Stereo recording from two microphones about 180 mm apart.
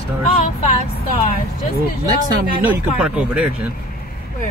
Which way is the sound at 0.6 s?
40° left (ahead or behind).